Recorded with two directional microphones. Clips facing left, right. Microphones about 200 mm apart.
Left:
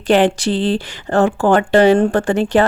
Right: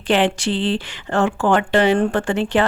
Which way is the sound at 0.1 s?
40° left (ahead or behind).